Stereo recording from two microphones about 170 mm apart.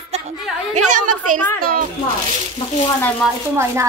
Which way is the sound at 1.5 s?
60° right (ahead or behind).